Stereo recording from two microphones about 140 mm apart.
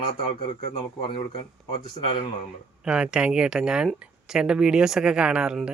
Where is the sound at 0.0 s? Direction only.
40° left (ahead or behind).